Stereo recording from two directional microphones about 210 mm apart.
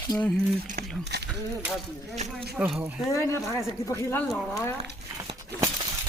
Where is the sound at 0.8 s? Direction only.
45° right (ahead or behind).